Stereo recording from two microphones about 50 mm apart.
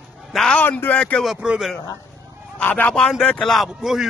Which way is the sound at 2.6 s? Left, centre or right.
Left.